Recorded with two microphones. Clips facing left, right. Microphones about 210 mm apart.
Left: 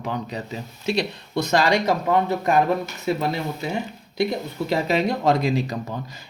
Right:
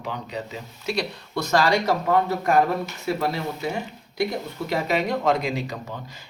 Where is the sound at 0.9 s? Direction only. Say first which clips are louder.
Left 3 dB; 20° left (ahead or behind).